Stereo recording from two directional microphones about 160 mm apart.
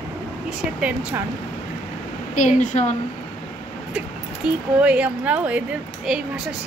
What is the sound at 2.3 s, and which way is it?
Speech, 50° left (ahead or behind).